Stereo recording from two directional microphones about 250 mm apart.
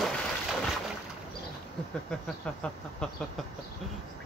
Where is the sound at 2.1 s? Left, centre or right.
Centre.